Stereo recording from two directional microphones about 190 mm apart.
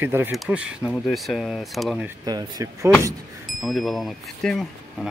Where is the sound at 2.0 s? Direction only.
20° right (ahead or behind).